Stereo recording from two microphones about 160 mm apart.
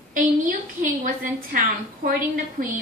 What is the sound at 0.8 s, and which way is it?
A woman's voice, 55° right (ahead or behind).